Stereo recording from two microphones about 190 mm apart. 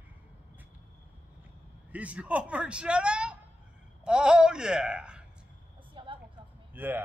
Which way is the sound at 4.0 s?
5° right (ahead or behind).